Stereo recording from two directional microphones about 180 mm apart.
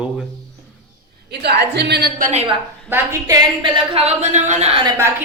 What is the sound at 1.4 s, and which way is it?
A woman's voice, 70° right (ahead or behind).